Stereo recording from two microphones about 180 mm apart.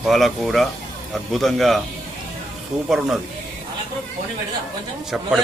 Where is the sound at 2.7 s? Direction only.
20° right (ahead or behind).